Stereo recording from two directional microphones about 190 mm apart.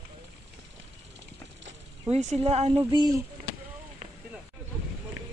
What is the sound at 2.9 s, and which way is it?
Speech, 20° right (ahead or behind).